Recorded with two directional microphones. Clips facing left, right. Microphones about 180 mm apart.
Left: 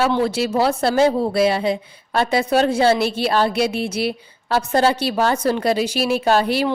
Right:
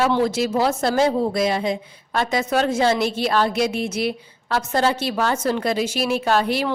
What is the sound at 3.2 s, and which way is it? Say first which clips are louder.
Music: left 2 dB; 30° left (ahead or behind).